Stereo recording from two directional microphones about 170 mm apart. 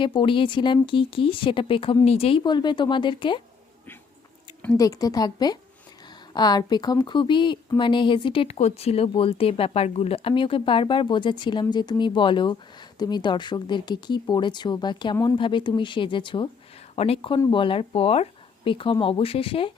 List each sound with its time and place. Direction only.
0.0 s speech: 30° left (ahead or behind)
4.6 s speech: 20° left (ahead or behind)